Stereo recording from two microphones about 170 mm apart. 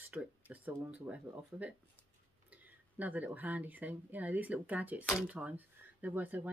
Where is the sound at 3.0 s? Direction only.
10° right (ahead or behind).